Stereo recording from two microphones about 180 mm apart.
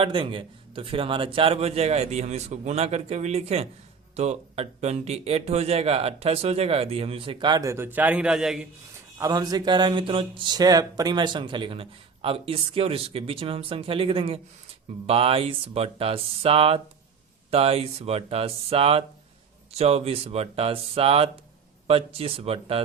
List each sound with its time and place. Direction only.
0.0 s speech: 30° right (ahead or behind); by 8.6 s centre (ahead or behind)
9.1 s speech: 20° right (ahead or behind)